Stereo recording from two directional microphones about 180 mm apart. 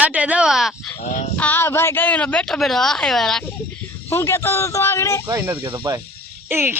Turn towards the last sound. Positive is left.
turn(degrees=-10)  # may be behind; listen again after turning